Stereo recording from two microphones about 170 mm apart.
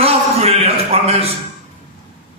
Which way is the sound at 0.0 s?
35° right (ahead or behind).